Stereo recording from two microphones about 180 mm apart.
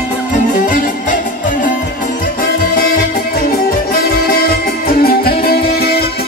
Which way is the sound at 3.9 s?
55° left (ahead or behind).